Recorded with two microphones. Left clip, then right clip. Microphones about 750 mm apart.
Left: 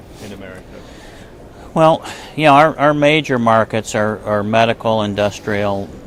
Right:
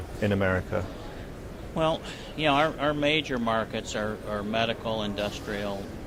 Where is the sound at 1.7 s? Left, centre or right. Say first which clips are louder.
Left 15 dB; left.